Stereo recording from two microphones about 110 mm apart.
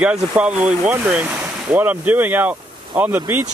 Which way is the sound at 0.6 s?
10° right (ahead or behind).